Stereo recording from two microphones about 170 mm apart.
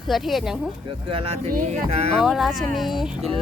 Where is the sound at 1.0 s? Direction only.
35° right (ahead or behind).